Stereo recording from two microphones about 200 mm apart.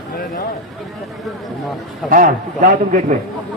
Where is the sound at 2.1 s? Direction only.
45° right (ahead or behind).